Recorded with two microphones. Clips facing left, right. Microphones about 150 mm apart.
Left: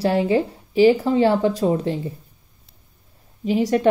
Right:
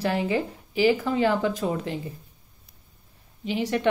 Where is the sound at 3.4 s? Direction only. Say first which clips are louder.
Left 7 dB; 40° left (ahead or behind).